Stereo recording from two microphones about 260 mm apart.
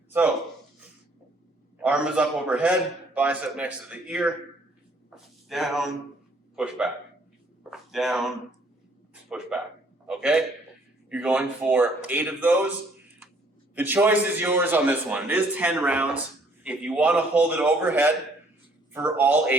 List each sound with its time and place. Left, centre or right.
1.8 s a man's voice: centre
9.3 s a man's voice: centre
13.7 s a man's voice: centre